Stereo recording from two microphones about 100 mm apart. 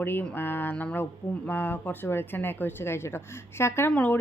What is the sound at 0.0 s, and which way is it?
Speech, 20° left (ahead or behind).